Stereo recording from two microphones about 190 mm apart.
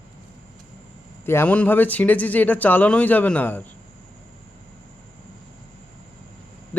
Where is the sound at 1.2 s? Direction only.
10° left (ahead or behind).